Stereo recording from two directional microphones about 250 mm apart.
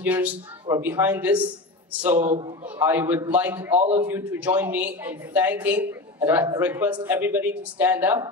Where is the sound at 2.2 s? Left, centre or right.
Right.